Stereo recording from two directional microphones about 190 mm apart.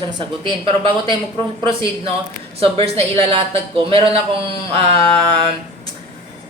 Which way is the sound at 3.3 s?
30° right (ahead or behind).